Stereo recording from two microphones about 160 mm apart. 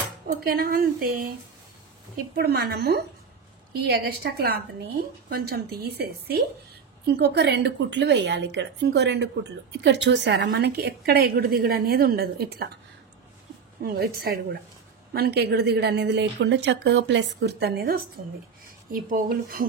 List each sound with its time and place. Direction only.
0.3 s a woman's voice: 70° right (ahead or behind)
2.1 s a woman's voice: 75° right (ahead or behind)
3.8 s a woman's voice: 75° right (ahead or behind)
13.8 s a woman's voice: 80° right
15.1 s a woman's voice: 90° right
18.9 s speech: 65° right (ahead or behind)